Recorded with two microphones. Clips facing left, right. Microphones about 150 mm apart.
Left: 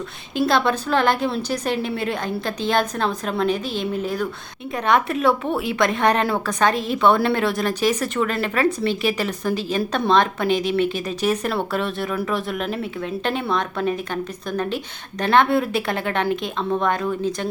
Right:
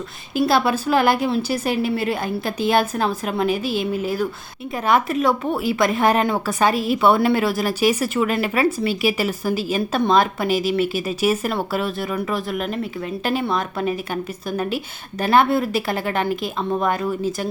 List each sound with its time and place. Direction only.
0.3 s a woman's voice: 5° right (ahead or behind)